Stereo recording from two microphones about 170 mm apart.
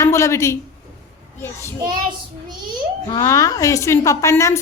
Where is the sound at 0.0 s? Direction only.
15° left (ahead or behind).